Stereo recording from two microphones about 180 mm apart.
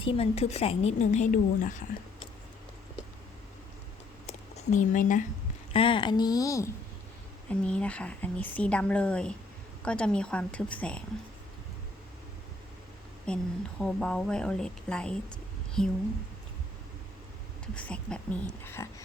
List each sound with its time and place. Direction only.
0.0 s a woman's voice: 30° left (ahead or behind)
4.3 s speech: 40° left (ahead or behind)
5.7 s a woman's voice: 30° left (ahead or behind)
7.6 s a woman's voice: 5° left (ahead or behind)
13.2 s a woman's voice: 5° left (ahead or behind)
17.7 s a woman's voice: 5° left (ahead or behind)